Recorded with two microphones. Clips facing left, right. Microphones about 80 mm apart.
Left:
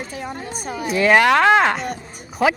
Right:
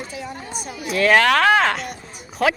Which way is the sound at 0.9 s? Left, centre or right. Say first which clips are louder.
Left 1 dB; centre.